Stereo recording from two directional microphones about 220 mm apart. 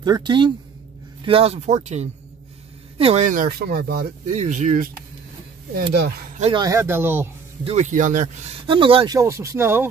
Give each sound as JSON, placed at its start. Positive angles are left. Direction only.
{"t": 0.0, "sound": "speech", "side_deg": -20}
{"t": 4.3, "sound": "speech", "side_deg": -30}
{"t": 6.3, "sound": "speech", "side_deg": -30}
{"t": 6.6, "sound": "speech", "side_deg": -15}
{"t": 7.6, "sound": "speech", "side_deg": -30}
{"t": 8.6, "sound": "speech", "side_deg": -25}